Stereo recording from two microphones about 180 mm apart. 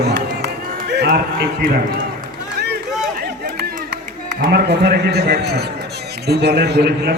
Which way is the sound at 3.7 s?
65° right (ahead or behind).